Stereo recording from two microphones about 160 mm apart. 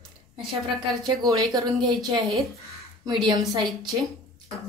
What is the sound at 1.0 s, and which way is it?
A woman's voice, 25° right (ahead or behind).